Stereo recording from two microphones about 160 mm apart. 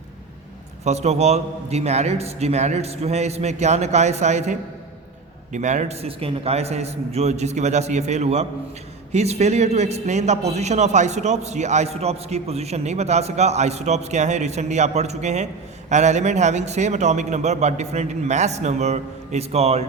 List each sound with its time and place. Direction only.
0.9 s a man's voice: 45° right (ahead or behind)